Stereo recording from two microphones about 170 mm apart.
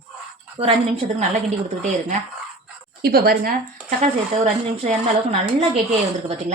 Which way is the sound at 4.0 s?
40° right (ahead or behind).